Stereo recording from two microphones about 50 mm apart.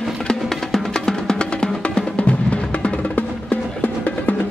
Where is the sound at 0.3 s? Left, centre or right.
Centre; by 3.0 s left.